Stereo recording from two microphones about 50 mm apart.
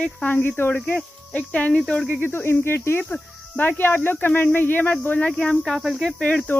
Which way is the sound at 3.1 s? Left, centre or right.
Left.